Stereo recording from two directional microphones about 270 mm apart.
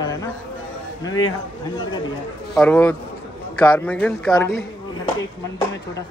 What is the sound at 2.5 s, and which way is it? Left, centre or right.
A man's voice, centre.